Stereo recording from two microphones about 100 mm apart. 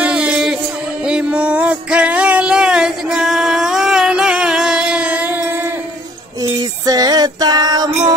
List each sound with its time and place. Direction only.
0.0 s music: 10° right (ahead or behind)
6.5 s female singing: 40° right (ahead or behind)